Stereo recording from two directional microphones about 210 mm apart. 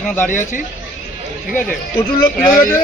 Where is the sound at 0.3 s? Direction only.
40° left (ahead or behind).